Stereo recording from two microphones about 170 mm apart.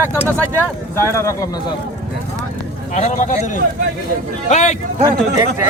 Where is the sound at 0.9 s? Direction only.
15° left (ahead or behind).